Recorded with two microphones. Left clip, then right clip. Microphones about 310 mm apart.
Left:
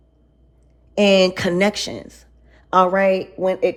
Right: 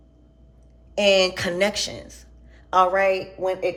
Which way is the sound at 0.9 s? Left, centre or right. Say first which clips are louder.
Left 3 dB; left.